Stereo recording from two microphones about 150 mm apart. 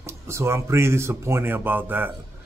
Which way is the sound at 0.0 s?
20° right (ahead or behind).